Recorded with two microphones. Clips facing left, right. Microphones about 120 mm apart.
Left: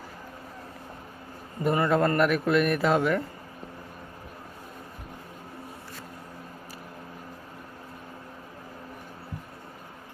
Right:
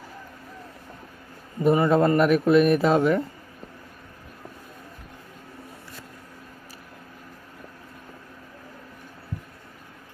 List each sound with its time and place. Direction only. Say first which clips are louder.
1.6 s speech: right 4 dB; 15° right (ahead or behind)